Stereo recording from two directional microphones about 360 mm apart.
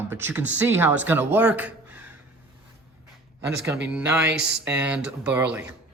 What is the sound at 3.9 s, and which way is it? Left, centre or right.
Speech, centre.